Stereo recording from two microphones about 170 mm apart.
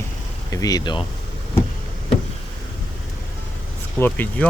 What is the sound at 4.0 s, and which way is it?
Speech, 10° left (ahead or behind).